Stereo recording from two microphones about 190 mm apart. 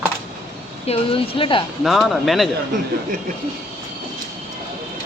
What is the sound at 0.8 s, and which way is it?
Speech, 30° left (ahead or behind).